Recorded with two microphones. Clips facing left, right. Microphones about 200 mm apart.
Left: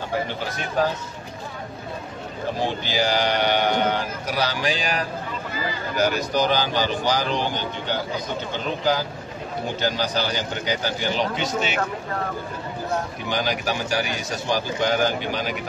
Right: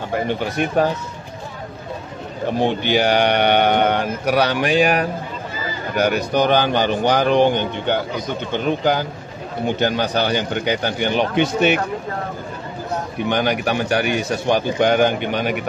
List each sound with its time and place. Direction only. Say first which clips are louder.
0.6 s speech: right 10 dB; 65° right (ahead or behind)
2.6 s speech: right 7 dB; 60° right (ahead or behind)
13.3 s speech: right 5 dB; 60° right (ahead or behind)